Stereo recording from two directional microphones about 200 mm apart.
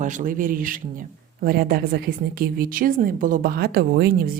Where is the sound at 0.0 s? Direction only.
40° right (ahead or behind).